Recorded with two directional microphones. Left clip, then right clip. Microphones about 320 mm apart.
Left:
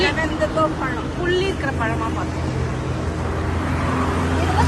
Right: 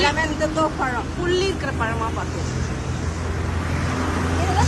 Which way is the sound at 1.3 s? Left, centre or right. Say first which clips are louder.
Left 1 dB; centre.